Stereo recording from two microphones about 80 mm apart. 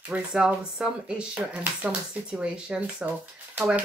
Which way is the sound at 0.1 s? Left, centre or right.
Centre.